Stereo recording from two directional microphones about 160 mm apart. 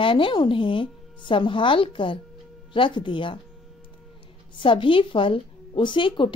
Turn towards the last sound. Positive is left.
turn(degrees=30)  # may be behind; listen again after turning